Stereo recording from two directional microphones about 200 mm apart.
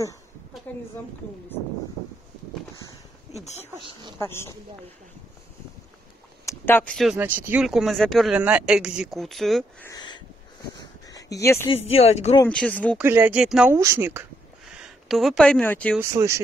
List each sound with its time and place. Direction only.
0.7 s a woman's voice: 10° left (ahead or behind)
3.7 s speech: 25° right (ahead or behind)
4.2 s speech: 15° left (ahead or behind)
6.4 s speech: 10° left (ahead or behind)
7.2 s speech: 10° right (ahead or behind)
9.8 s a sound: 20° left (ahead or behind)
11.7 s speech: 30° left (ahead or behind)
12.4 s speech: 5° left (ahead or behind)
12.9 s speech: 10° right (ahead or behind); by 16.0 s 10° left (ahead or behind)
16.0 s speech: 15° right (ahead or behind)